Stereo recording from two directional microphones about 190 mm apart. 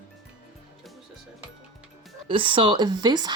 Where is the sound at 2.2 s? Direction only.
30° right (ahead or behind).